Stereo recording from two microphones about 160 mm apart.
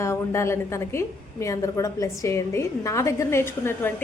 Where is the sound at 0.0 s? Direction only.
15° left (ahead or behind).